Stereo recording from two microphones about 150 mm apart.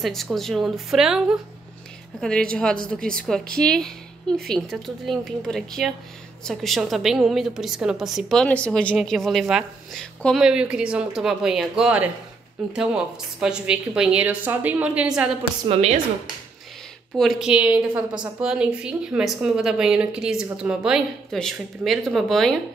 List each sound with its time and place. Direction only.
0.0 s a woman's voice: centre (ahead or behind)
15.6 s a woman's voice: 45° right (ahead or behind)
17.2 s a woman's voice: centre (ahead or behind)